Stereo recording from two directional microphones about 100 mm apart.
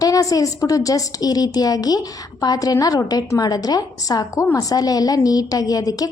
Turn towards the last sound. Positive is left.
turn(degrees=40)  # may be behind; listen again after turning